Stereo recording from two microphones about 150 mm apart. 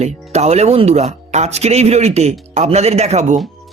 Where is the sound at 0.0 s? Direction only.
45° right (ahead or behind).